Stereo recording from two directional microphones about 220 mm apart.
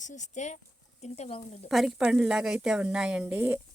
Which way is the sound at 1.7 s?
Centre (ahead or behind).